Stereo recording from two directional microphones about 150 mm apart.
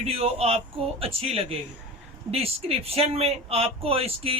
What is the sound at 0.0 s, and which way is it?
Speech, 40° right (ahead or behind).